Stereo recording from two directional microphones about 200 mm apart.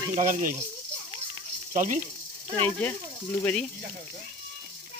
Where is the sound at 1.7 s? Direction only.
40° right (ahead or behind).